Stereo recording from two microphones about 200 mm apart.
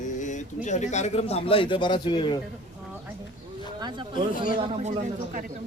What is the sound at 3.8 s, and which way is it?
Speech, 20° right (ahead or behind).